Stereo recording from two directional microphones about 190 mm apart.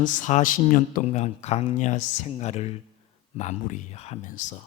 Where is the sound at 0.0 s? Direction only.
40° left (ahead or behind).